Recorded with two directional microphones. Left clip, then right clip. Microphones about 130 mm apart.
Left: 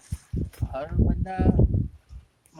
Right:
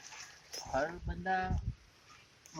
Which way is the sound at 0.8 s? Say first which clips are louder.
Left 7 dB; 30° left (ahead or behind).